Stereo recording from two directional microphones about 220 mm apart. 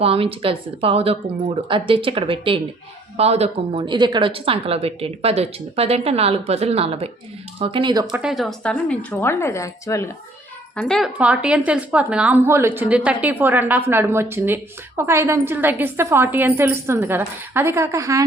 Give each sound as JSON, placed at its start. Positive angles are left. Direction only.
{"t": 0.0, "sound": "speech", "side_deg": -25}
{"t": 8.2, "sound": "a woman's voice", "side_deg": 0}
{"t": 10.8, "sound": "speech", "side_deg": 0}